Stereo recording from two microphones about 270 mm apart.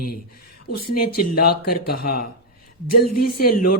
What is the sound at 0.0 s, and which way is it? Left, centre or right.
Speech, left.